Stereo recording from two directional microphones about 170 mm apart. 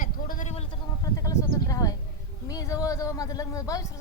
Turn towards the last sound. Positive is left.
turn(degrees=20)  # may be behind; listen again after turning